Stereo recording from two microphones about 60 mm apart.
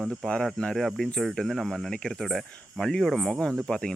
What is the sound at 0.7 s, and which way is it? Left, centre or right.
Speech, centre.